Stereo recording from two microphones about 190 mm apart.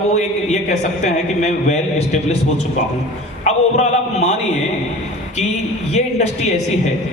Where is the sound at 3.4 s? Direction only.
35° left (ahead or behind).